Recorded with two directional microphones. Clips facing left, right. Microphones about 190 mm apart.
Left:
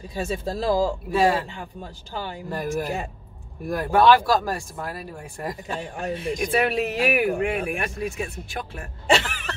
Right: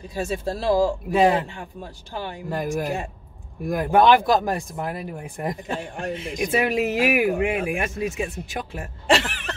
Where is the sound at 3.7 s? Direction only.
15° right (ahead or behind).